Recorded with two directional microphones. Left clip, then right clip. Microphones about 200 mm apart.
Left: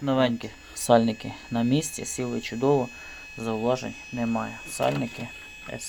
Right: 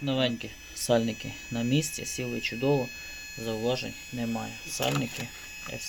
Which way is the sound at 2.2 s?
Centre (ahead or behind).